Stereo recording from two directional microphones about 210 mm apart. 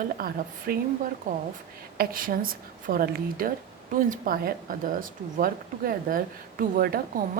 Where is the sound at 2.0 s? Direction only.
40° right (ahead or behind).